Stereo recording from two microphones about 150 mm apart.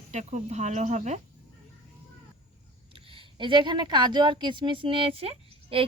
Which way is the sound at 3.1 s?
35° right (ahead or behind).